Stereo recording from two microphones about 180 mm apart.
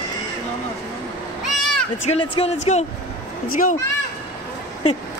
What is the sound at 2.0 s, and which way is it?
Speech, 35° left (ahead or behind).